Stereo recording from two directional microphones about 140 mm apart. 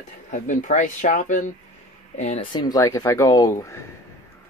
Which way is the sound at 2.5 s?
25° left (ahead or behind).